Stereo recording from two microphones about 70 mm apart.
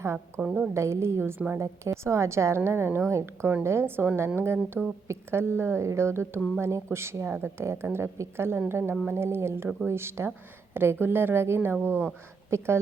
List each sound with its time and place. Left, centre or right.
0.3 s a woman's voice: centre
0.7 s a woman's voice: right